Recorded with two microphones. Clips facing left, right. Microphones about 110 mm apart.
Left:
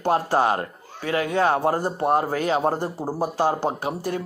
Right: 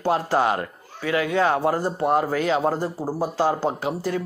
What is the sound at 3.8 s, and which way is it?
Speech, 45° left (ahead or behind).